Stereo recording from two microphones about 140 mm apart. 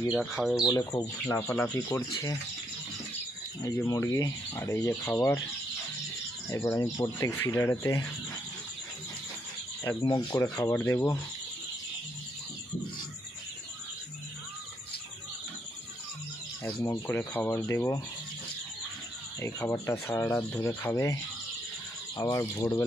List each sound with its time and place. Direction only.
0.1 s speech: 5° left (ahead or behind)
0.9 s speech: 20° left (ahead or behind)
3.6 s speech: 20° left (ahead or behind)
6.5 s speech: 20° left (ahead or behind)
10.0 s speech: 30° left (ahead or behind)
10.5 s speech: 15° left (ahead or behind)
16.6 s speech: 15° left (ahead or behind)
19.4 s speech: 20° left (ahead or behind)